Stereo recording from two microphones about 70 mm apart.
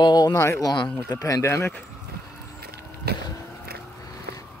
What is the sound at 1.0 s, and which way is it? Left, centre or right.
Speech, left.